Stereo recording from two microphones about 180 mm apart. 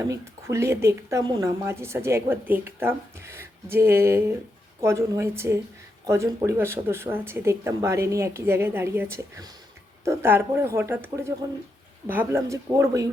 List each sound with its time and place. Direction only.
0.0 s speech: 15° right (ahead or behind)